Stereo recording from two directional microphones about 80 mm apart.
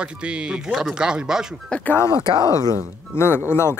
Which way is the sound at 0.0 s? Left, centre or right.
Centre.